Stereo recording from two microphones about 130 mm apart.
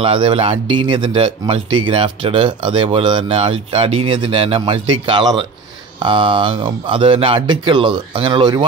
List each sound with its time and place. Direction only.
0.0 s speech: 45° right (ahead or behind)